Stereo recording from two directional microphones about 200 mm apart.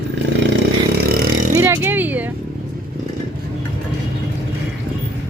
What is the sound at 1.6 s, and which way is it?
Speech, 10° right (ahead or behind).